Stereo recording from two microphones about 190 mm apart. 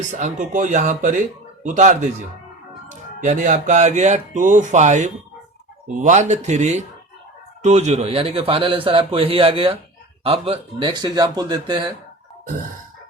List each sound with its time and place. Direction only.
0.1 s speech: 40° right (ahead or behind)
3.2 s a man's voice: 40° right (ahead or behind); by 11.9 s 25° right (ahead or behind)